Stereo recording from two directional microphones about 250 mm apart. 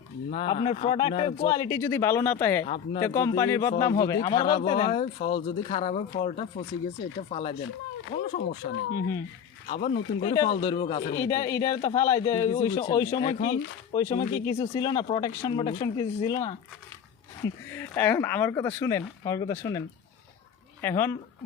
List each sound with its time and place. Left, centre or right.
0.3 s speech: left
2.6 s speech: left
3.0 s speech: centre
11.1 s speech: centre
13.4 s speech: left
13.9 s speech: centre
20.8 s speech: centre